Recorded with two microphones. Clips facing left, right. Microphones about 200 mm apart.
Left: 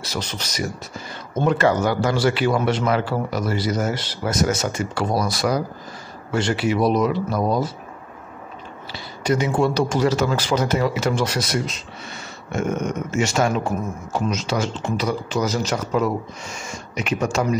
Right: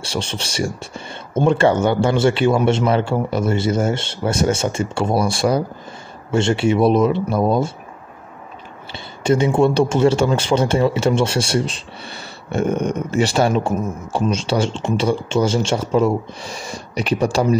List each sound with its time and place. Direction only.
0.0 s speech: 30° right (ahead or behind)
8.9 s speech: 25° right (ahead or behind)